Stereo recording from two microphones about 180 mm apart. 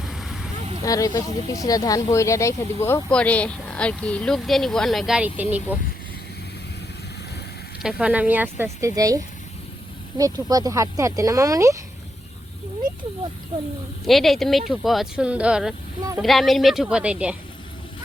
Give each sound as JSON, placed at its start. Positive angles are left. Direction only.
{"t": 0.0, "sound": "vehicle", "side_deg": 0}
{"t": 0.9, "sound": "speech", "side_deg": 20}
{"t": 7.8, "sound": "speech", "side_deg": -5}
{"t": 14.0, "sound": "speech", "side_deg": 0}